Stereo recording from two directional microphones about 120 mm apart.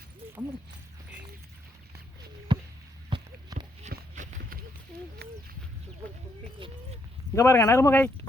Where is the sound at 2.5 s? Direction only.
45° right (ahead or behind).